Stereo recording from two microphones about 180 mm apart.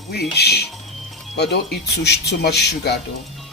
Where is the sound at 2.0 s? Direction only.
65° left (ahead or behind).